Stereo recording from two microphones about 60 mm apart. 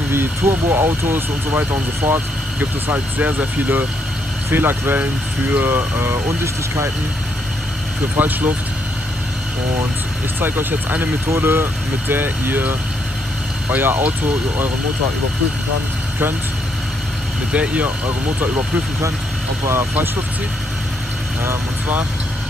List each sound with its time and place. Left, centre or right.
0.1 s speech: right
8.2 s speech: right
10.4 s speech: right
11.2 s speech: right
17.5 s speech: right
19.6 s speech: right